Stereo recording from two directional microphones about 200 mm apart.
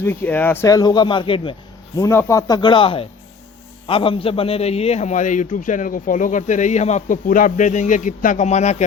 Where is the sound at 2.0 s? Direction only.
15° left (ahead or behind).